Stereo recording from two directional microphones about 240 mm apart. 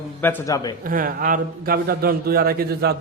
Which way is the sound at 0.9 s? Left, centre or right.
Right.